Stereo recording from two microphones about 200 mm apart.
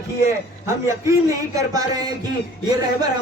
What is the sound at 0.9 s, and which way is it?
A man's voice, 15° right (ahead or behind).